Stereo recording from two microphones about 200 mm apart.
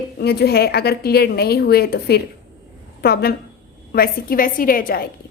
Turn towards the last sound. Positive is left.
turn(degrees=45)  # may be behind; listen again after turning